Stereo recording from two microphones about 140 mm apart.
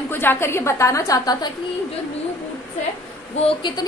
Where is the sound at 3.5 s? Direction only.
35° left (ahead or behind).